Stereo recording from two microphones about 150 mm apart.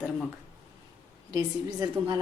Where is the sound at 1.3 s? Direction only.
25° right (ahead or behind).